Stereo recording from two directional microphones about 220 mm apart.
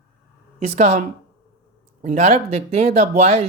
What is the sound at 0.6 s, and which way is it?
Speech, 30° right (ahead or behind).